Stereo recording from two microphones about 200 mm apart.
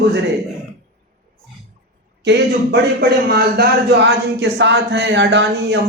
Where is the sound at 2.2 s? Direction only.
55° right (ahead or behind).